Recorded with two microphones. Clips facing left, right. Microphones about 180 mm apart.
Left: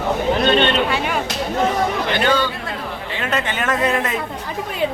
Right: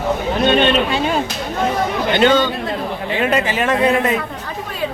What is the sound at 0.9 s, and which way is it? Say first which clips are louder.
Speech: right 3 dB; 30° right (ahead or behind).